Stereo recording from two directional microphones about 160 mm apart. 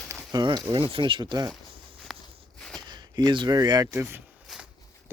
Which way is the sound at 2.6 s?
5° left (ahead or behind).